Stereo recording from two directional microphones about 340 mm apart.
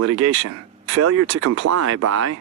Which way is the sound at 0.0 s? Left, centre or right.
Right.